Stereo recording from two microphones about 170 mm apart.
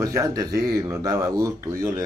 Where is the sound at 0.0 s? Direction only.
20° right (ahead or behind).